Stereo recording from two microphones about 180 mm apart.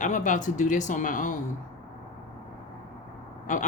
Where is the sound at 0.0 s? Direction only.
45° left (ahead or behind).